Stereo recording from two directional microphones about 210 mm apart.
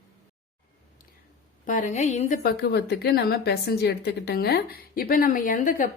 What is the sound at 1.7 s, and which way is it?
A woman's voice, 35° left (ahead or behind).